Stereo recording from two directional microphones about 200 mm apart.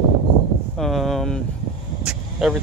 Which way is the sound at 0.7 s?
Centre (ahead or behind).